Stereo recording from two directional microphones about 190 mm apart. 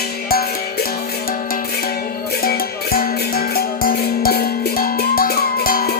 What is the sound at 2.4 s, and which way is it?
Music, 50° left (ahead or behind).